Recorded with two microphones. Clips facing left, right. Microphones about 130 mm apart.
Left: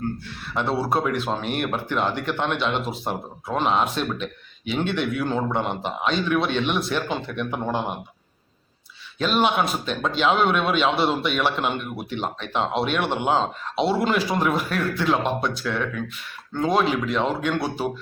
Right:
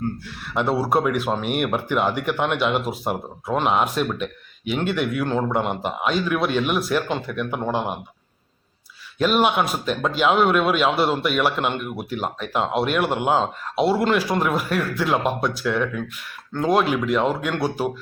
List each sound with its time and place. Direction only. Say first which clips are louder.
0.5 s speech: right 3 dB; 10° right (ahead or behind)
9.1 s a man's voice: right 2 dB; 5° right (ahead or behind)